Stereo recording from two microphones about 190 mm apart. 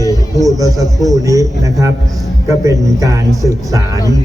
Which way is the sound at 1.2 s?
15° right (ahead or behind).